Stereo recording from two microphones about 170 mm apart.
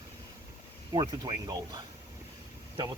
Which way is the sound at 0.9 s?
20° right (ahead or behind).